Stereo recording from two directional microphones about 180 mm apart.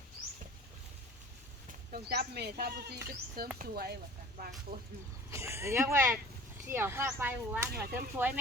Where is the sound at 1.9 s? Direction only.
60° right (ahead or behind).